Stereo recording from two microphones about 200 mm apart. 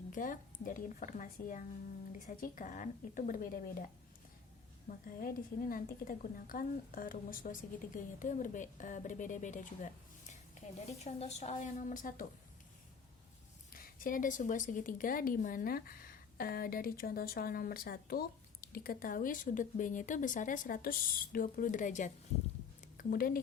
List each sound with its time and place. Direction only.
0.1 s a woman's voice: 40° left (ahead or behind)
4.9 s a woman's voice: 45° left (ahead or behind)
13.7 s a woman's voice: 45° left (ahead or behind)